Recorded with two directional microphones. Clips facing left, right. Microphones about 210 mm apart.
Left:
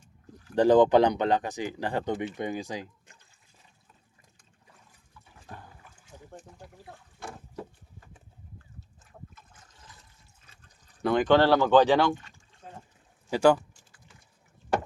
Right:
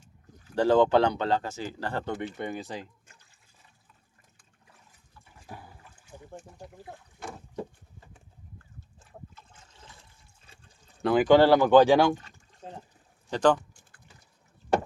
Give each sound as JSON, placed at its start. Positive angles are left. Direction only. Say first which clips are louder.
{"t": 0.5, "sound": "speech", "louder": "left 2 dB", "side_deg": 15}
{"t": 5.5, "sound": "a sound", "louder": "right 1 dB", "side_deg": -10}
{"t": 7.2, "sound": "boat", "louder": "right 1 dB", "side_deg": -20}
{"t": 9.3, "sound": "water", "louder": "right 1 dB", "side_deg": -25}
{"t": 11.0, "sound": "speech", "louder": "right 2 dB", "side_deg": -5}
{"t": 12.1, "sound": "a sound", "louder": "right 1 dB", "side_deg": -40}
{"t": 13.3, "sound": "speech", "louder": "left 2 dB", "side_deg": 10}